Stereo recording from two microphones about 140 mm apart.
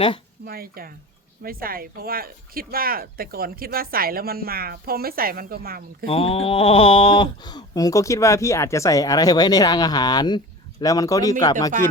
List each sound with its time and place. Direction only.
0.4 s speech: 90° right
6.1 s speech: 40° left (ahead or behind); by 11.5 s 25° left (ahead or behind)